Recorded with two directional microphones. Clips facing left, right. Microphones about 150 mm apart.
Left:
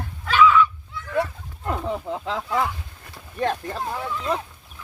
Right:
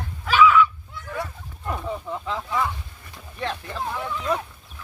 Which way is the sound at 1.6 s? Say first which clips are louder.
Left 3 dB; 90° left.